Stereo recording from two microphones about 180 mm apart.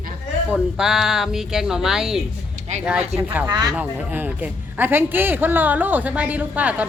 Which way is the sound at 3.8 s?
10° right (ahead or behind).